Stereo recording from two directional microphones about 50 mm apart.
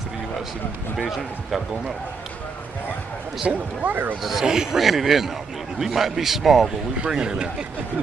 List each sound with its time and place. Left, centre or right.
0.9 s a man's voice: centre
3.4 s speech: right
4.2 s a man's voice: centre
4.5 s speech: centre
4.8 s a man's voice: centre